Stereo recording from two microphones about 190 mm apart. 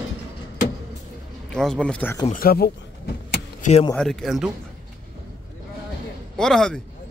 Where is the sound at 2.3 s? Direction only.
50° left (ahead or behind).